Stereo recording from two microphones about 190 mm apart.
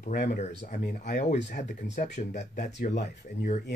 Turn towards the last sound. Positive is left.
turn(degrees=55)  # may be behind; listen again after turning